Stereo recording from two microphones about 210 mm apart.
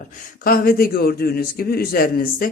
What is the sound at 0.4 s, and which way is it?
A man's voice, 45° left (ahead or behind).